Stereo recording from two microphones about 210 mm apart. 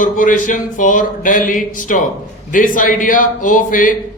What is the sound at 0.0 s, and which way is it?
A man's voice, 40° left (ahead or behind).